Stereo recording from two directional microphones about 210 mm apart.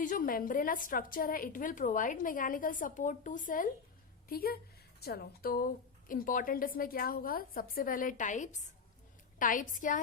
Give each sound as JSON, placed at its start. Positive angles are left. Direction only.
{"t": 0.0, "sound": "a woman's voice", "side_deg": 40}